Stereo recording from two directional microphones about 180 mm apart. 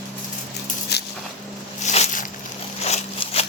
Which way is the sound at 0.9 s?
65° left (ahead or behind).